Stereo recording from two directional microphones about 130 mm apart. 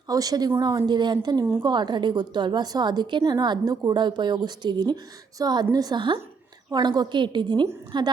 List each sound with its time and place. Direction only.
0.1 s a woman's voice: 30° right (ahead or behind)